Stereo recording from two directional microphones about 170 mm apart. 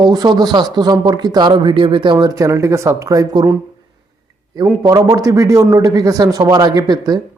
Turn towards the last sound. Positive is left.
turn(degrees=-25)  # may be behind; listen again after turning